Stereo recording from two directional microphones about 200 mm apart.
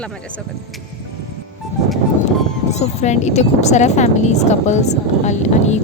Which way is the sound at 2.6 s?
35° left (ahead or behind).